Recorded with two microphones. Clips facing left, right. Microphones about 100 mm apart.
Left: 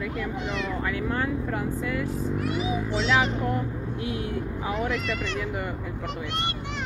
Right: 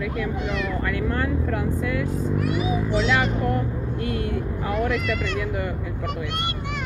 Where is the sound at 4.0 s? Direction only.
60° right (ahead or behind).